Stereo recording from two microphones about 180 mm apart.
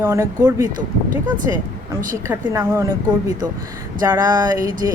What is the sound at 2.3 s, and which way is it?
Speech, 15° right (ahead or behind).